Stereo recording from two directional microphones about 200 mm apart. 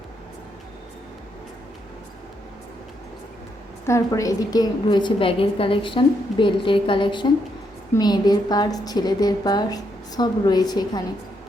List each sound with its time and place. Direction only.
3.8 s a woman's voice: 15° left (ahead or behind)